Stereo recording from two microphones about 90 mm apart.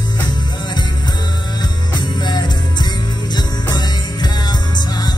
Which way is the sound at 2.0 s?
55° left (ahead or behind).